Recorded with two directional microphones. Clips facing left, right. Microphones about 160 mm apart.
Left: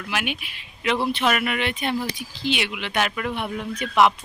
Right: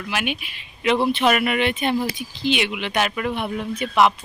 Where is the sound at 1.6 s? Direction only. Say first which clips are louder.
Right 4 dB; 25° right (ahead or behind).